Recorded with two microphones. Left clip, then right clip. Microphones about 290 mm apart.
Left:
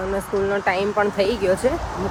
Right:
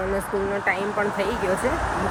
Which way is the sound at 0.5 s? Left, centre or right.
Centre.